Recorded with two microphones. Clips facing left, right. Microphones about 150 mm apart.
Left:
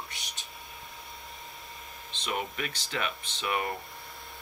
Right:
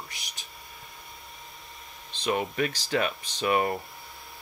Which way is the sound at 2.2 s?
35° right (ahead or behind).